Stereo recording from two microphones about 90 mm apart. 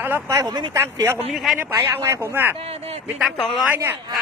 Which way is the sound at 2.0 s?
30° right (ahead or behind).